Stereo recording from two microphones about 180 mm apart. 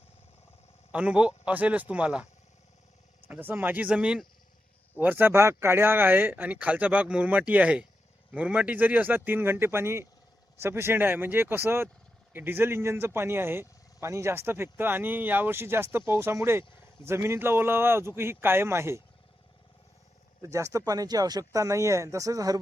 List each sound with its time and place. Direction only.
0.9 s a man's voice: 5° right (ahead or behind)
3.2 s speech: 10° right (ahead or behind)
20.4 s speech: 15° right (ahead or behind)